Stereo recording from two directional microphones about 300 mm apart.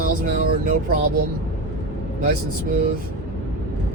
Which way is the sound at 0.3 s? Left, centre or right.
Right.